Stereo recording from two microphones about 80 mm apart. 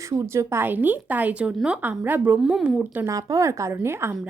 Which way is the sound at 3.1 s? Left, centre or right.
Right.